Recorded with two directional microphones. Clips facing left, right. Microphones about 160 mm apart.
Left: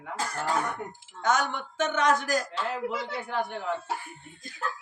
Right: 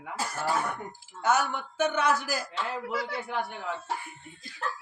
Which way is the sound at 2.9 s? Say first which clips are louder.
Right 1 dB; 25° left (ahead or behind).